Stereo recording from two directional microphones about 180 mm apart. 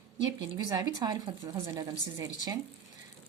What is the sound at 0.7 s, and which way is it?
A woman's voice, 20° right (ahead or behind).